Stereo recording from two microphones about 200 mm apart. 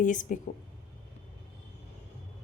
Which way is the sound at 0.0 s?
40° left (ahead or behind).